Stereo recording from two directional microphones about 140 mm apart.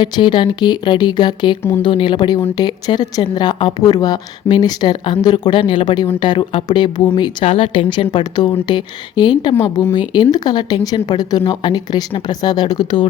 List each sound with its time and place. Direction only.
0.0 s a woman's voice: 35° left (ahead or behind)
9.6 s speech: 20° left (ahead or behind)